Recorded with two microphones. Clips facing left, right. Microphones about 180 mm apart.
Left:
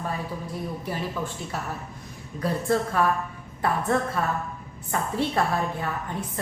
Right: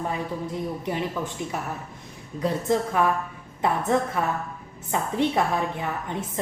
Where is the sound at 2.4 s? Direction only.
20° right (ahead or behind).